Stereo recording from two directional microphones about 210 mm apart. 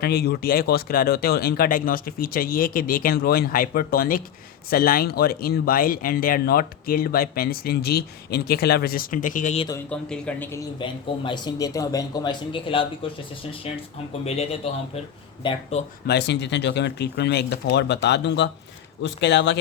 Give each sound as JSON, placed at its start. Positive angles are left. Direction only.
{"t": 0.0, "sound": "speech", "side_deg": 50}
{"t": 9.9, "sound": "a man's voice", "side_deg": 5}
{"t": 10.8, "sound": "speech", "side_deg": 25}
{"t": 16.0, "sound": "speech", "side_deg": 55}